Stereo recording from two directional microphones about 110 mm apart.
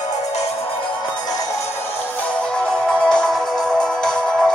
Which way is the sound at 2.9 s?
5° left (ahead or behind).